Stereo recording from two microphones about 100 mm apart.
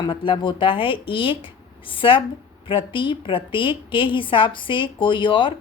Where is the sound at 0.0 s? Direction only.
55° left (ahead or behind).